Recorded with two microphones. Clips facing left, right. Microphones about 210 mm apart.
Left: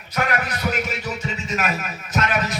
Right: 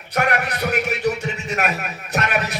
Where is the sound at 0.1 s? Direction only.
70° right (ahead or behind).